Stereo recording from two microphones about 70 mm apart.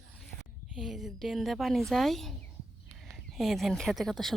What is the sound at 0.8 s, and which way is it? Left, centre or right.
Speech, centre.